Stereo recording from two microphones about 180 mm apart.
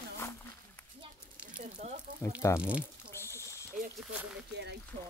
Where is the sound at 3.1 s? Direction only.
15° left (ahead or behind).